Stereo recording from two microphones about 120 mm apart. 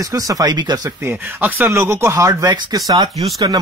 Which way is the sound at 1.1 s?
15° right (ahead or behind).